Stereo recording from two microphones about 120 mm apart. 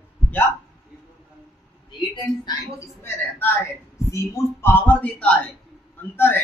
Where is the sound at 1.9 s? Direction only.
40° left (ahead or behind).